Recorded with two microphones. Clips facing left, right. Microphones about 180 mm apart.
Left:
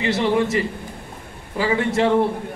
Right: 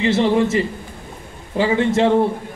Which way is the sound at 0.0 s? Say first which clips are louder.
Right 3 dB; 25° right (ahead or behind).